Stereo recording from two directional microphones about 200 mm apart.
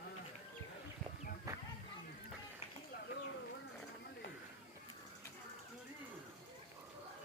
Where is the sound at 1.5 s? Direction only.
15° right (ahead or behind).